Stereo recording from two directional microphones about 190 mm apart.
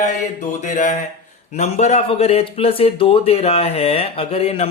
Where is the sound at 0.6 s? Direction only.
40° left (ahead or behind).